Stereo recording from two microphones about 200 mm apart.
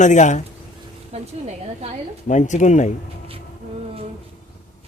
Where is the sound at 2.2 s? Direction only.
40° left (ahead or behind).